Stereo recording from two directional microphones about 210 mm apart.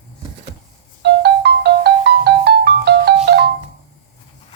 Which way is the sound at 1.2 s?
50° right (ahead or behind).